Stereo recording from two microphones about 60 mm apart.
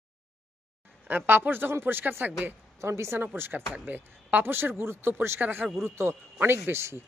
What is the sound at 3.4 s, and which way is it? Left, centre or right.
Speech, right.